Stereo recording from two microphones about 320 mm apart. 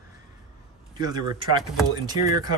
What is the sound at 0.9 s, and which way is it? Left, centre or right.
Speech, centre.